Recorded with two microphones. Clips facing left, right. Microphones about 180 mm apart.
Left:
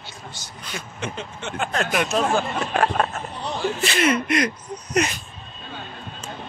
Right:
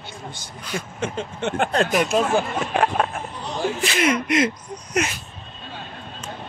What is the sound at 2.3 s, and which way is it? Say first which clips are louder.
Speech: right 1 dB; 15° right (ahead or behind).